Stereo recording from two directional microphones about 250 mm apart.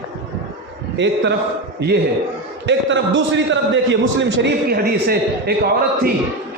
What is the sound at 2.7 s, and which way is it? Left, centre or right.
A man's voice, right.